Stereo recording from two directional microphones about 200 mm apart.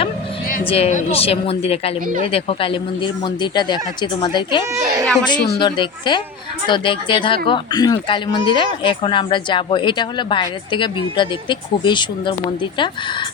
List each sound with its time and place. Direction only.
0.7 s speech: 30° left (ahead or behind)